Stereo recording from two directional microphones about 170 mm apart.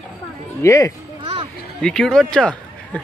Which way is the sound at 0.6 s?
15° left (ahead or behind).